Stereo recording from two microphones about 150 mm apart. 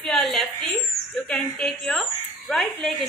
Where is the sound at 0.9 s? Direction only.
5° left (ahead or behind).